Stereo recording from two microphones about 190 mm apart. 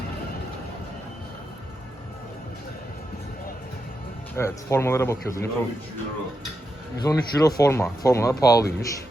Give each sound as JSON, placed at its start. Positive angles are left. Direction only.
{"t": 4.4, "sound": "speech", "side_deg": 15}
{"t": 7.0, "sound": "speech", "side_deg": 20}